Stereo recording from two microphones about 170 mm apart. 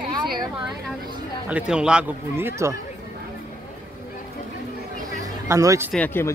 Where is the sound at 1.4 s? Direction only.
5° right (ahead or behind).